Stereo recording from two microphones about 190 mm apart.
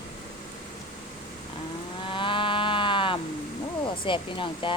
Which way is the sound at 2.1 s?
25° left (ahead or behind).